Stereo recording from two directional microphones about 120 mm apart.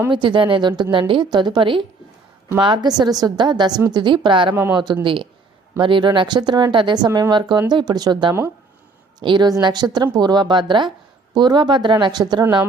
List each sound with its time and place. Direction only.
0.1 s a woman's voice: 40° right (ahead or behind)
8.3 s speech: 25° right (ahead or behind)
9.2 s a woman's voice: 40° right (ahead or behind)